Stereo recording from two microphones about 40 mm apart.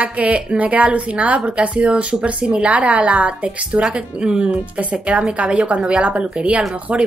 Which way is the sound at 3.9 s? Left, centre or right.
Right.